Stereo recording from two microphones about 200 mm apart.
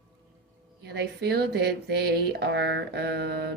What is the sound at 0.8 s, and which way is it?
Speech, 55° right (ahead or behind).